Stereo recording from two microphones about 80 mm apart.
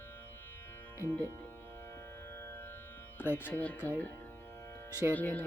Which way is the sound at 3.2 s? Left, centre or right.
Left.